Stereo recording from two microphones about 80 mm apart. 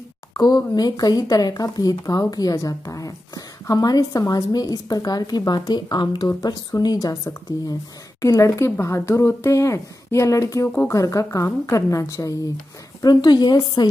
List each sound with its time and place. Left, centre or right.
0.3 s a sound: left
0.7 s a woman's voice: left
6.2 s speech: left
13.0 s a woman's voice: left